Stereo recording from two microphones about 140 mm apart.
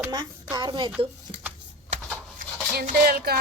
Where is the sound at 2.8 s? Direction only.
80° right.